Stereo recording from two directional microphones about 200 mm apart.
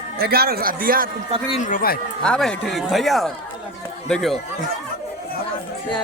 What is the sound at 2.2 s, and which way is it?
Speech, 5° left (ahead or behind).